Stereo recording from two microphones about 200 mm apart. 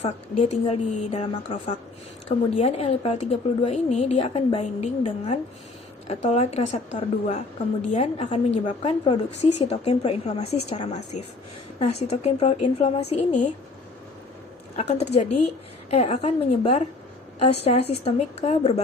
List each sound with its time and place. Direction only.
0.0 s a woman's voice: 30° left (ahead or behind)
14.8 s a woman's voice: 35° left (ahead or behind)